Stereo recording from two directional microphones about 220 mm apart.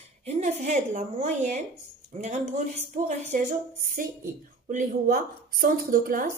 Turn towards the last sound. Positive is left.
turn(degrees=-40)  # may be behind; listen again after turning